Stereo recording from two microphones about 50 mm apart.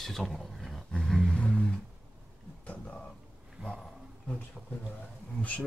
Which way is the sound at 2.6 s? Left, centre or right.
Left.